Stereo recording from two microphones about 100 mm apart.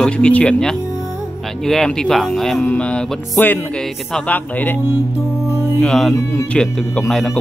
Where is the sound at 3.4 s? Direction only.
20° left (ahead or behind).